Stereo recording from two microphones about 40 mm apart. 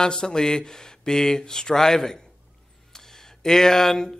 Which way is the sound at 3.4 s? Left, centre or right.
Centre.